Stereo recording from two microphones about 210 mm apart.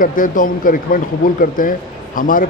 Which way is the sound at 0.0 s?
40° left (ahead or behind).